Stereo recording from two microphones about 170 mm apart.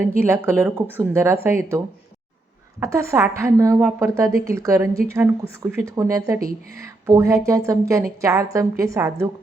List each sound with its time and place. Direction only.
0.0 s a woman's voice: 15° right (ahead or behind)
2.8 s a woman's voice: 15° right (ahead or behind)